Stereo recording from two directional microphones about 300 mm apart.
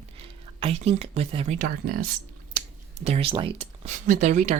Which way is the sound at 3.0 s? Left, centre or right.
Centre.